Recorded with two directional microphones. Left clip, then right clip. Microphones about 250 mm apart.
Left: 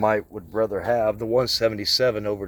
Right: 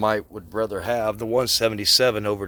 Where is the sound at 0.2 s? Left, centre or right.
Centre.